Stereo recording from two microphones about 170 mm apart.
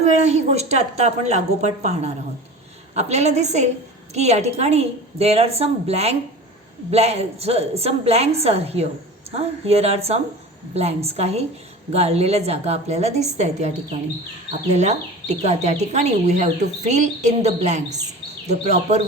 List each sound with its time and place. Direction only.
0.0 s a woman's voice: 40° right (ahead or behind)